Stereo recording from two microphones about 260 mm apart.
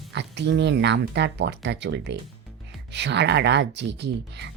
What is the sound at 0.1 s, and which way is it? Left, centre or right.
Speech, right.